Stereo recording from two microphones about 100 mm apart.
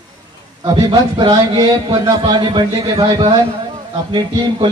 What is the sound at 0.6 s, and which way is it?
A man's voice, 50° right (ahead or behind).